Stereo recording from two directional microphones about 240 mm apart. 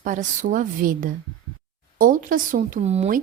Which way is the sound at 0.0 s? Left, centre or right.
Right.